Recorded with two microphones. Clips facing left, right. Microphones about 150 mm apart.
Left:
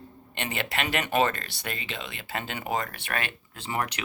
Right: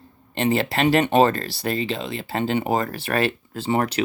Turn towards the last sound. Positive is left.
turn(degrees=-30)  # may be behind; listen again after turning